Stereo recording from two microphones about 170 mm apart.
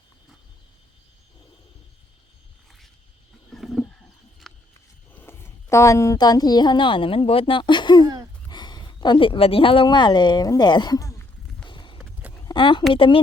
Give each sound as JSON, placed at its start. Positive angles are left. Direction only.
{"t": 3.5, "sound": "wild animals", "side_deg": 0}
{"t": 5.1, "sound": "a woman's voice", "side_deg": 15}
{"t": 8.4, "sound": "a sound", "side_deg": 25}
{"t": 12.5, "sound": "speech", "side_deg": 30}